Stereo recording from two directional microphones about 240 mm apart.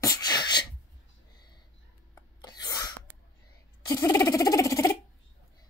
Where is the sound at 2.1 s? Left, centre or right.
Centre.